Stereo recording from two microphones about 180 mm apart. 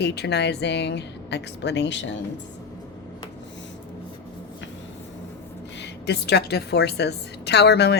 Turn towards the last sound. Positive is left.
turn(degrees=70)  # may be behind; listen again after turning